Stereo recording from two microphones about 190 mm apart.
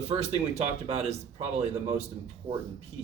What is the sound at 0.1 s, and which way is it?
Speech, 35° right (ahead or behind).